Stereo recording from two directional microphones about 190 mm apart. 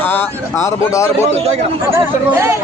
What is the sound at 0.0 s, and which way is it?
A man's voice, 10° left (ahead or behind).